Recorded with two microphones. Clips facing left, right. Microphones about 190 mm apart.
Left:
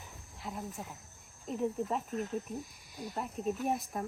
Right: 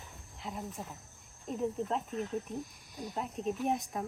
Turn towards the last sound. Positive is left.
turn(degrees=0)  # may be behind; listen again after turning